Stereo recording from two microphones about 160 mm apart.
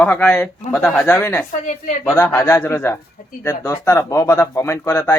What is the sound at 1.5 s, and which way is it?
Speech, 50° left (ahead or behind).